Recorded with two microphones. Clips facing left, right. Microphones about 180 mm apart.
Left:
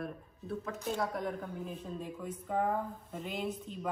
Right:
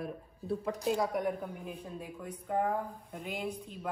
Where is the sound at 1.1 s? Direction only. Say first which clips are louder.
Right 3 dB; 10° right (ahead or behind).